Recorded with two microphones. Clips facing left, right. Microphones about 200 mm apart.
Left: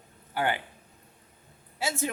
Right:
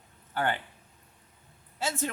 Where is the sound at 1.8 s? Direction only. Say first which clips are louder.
Left 1 dB; 10° left (ahead or behind).